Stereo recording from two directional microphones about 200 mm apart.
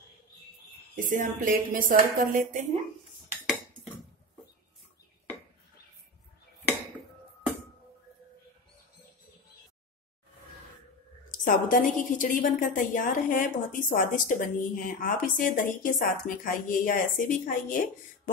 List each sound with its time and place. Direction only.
0.9 s a woman's voice: 40° right (ahead or behind)
11.4 s a woman's voice: 40° left (ahead or behind)